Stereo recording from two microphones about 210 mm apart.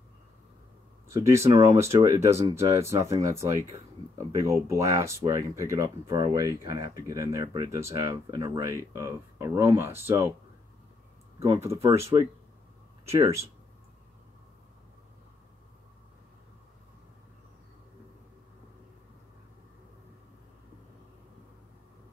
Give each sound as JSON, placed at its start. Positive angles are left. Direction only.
{"t": 1.0, "sound": "speech", "side_deg": -15}
{"t": 11.3, "sound": "speech", "side_deg": -20}